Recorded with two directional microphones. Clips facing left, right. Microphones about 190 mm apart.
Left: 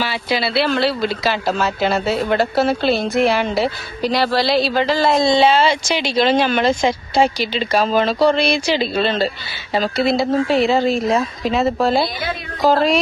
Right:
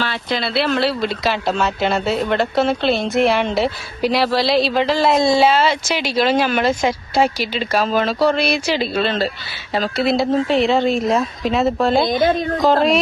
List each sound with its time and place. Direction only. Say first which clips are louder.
0.0 s speech: left 2 dB; 5° left (ahead or behind)